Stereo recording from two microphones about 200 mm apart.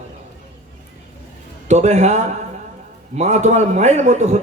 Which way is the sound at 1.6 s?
35° right (ahead or behind).